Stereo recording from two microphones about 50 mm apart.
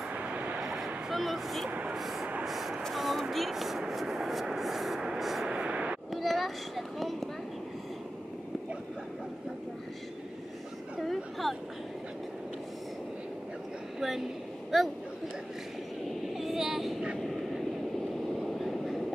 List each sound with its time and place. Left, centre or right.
0.1 s vehicle: right
1.1 s speech: centre
1.7 s speech: right
2.0 s speech: centre
2.9 s a sound: centre
5.5 s vehicle: right
6.1 s a sound: centre
11.0 s a sound: centre
13.9 s a sound: centre
14.7 s speech: centre
16.3 s vehicle: centre
18.4 s train: centre